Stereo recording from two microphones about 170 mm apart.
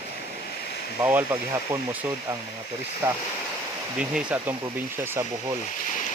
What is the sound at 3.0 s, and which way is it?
Speech, 15° right (ahead or behind).